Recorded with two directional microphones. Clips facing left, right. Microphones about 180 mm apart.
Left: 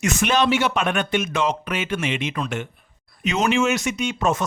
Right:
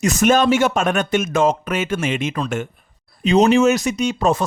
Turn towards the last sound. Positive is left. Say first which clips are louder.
# right 4 dB
turn(degrees=-35)  # may be behind; listen again after turning